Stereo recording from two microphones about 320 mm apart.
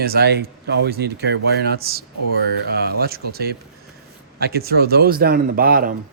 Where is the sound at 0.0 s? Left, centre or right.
Right.